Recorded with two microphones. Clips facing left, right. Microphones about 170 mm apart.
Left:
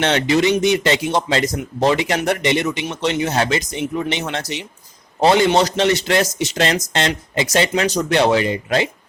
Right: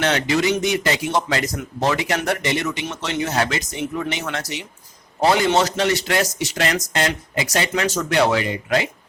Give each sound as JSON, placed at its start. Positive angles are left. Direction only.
{"t": 0.0, "sound": "speech", "side_deg": 25}